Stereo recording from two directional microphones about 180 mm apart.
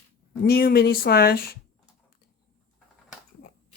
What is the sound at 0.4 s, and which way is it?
Speech, 60° left (ahead or behind).